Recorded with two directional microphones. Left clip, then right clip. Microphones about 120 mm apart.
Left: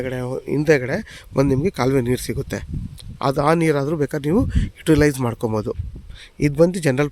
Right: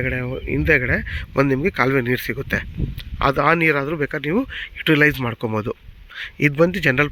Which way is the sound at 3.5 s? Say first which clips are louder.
Right 1 dB; 45° left (ahead or behind).